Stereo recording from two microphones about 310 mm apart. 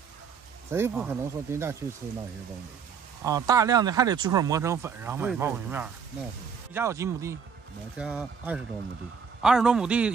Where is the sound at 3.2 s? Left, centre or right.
Centre.